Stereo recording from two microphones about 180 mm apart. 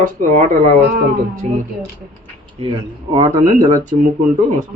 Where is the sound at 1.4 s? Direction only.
40° right (ahead or behind).